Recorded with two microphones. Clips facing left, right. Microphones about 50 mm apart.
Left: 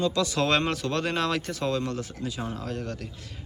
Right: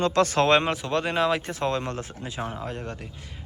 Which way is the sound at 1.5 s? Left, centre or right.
Right.